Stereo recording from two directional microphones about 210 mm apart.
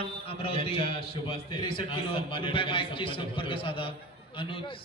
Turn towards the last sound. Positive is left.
turn(degrees=25)  # may be behind; listen again after turning